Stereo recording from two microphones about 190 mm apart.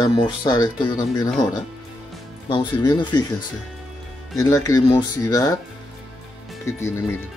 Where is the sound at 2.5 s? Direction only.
20° left (ahead or behind).